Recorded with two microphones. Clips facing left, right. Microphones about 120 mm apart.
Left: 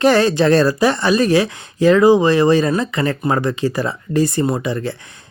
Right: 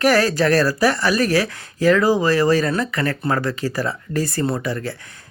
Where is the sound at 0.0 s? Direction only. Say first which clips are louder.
Left 3 dB; 25° left (ahead or behind).